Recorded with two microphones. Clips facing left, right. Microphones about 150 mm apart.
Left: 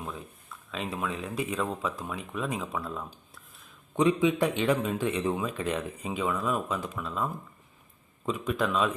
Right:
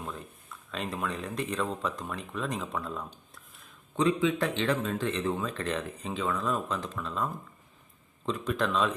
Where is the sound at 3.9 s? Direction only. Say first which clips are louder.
Left 2 dB; 15° left (ahead or behind).